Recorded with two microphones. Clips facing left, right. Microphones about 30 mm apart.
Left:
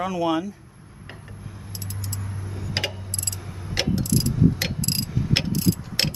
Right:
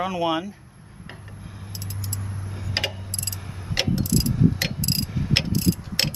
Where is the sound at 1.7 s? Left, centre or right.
Centre.